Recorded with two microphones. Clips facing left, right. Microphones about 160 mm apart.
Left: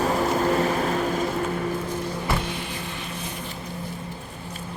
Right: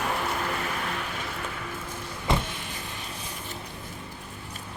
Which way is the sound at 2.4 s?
45° right (ahead or behind).